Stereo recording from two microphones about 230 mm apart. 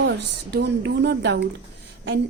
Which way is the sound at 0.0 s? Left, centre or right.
Right.